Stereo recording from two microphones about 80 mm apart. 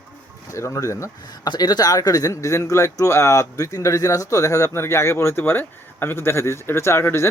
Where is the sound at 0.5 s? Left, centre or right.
Left.